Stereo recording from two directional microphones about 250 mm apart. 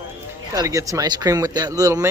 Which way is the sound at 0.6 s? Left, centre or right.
Centre.